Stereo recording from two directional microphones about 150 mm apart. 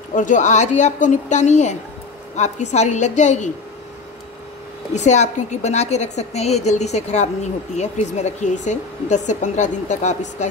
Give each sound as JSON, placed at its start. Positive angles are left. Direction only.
{"t": 0.1, "sound": "speech", "side_deg": 60}
{"t": 4.9, "sound": "speech", "side_deg": 50}